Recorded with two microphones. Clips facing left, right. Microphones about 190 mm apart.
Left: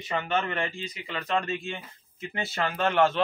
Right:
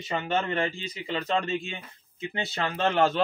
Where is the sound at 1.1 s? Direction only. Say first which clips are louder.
Right 2 dB; 25° right (ahead or behind).